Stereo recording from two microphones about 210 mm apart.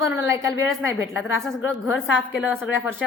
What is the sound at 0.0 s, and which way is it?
Speech, 15° right (ahead or behind).